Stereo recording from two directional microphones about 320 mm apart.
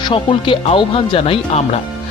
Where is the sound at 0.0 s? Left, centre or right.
Centre.